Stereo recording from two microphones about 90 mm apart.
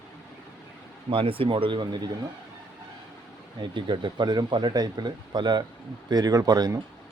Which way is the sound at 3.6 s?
60° right (ahead or behind).